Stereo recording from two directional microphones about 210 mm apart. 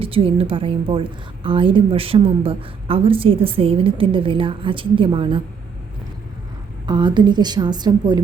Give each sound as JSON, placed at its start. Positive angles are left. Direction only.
{"t": 0.0, "sound": "a woman's voice", "side_deg": -25}
{"t": 6.8, "sound": "a woman's voice", "side_deg": -20}